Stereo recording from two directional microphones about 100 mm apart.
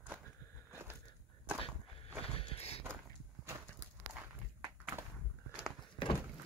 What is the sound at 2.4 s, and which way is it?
Horse, 80° left.